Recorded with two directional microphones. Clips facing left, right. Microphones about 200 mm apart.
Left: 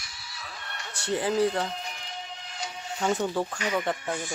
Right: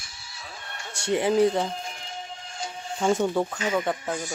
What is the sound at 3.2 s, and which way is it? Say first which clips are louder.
Speech: right 4 dB; 10° right (ahead or behind).